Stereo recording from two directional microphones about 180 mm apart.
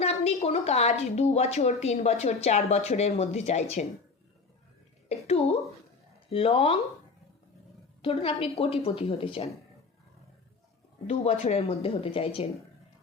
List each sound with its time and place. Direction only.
0.0 s a woman's voice: 35° left (ahead or behind)
5.0 s a woman's voice: 35° left (ahead or behind)
8.0 s a woman's voice: 30° left (ahead or behind)
11.0 s a woman's voice: 40° left (ahead or behind)